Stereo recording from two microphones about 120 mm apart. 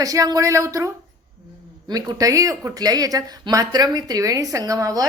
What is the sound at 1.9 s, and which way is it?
A woman's voice, 30° right (ahead or behind).